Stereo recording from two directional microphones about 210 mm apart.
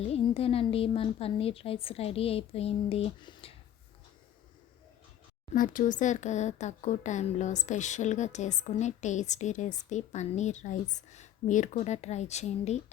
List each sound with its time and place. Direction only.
0.1 s a woman's voice: 25° left (ahead or behind)
5.5 s speech: 40° left (ahead or behind)